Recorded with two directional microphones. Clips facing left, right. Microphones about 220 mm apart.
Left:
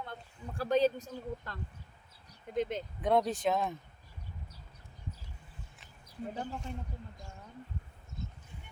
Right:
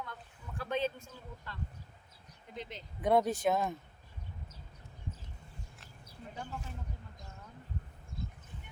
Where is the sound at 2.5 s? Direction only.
50° left (ahead or behind).